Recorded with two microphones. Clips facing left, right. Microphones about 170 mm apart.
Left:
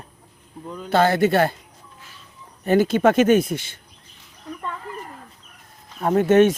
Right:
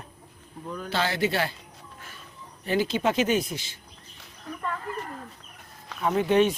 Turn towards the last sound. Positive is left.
turn(degrees=50)  # may be behind; listen again after turning